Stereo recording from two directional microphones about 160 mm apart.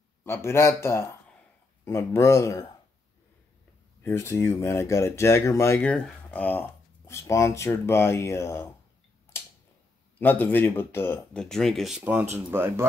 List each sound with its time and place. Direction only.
0.2 s speech: 15° left (ahead or behind)
4.0 s speech: 15° left (ahead or behind)
10.1 s speech: 10° left (ahead or behind)
12.0 s speech: 15° right (ahead or behind)